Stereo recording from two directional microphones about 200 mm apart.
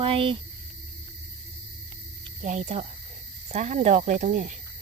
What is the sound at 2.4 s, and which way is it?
Speech, 35° right (ahead or behind).